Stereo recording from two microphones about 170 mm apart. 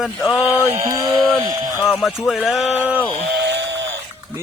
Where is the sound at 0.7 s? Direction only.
20° right (ahead or behind).